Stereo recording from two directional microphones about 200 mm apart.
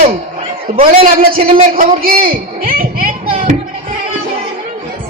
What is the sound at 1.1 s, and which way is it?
A man's voice, 45° right (ahead or behind).